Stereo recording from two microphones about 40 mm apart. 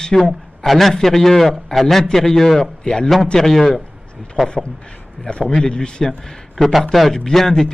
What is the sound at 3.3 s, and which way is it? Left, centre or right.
Speech, centre.